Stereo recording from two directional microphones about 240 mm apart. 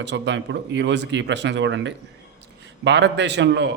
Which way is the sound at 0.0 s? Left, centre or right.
Right.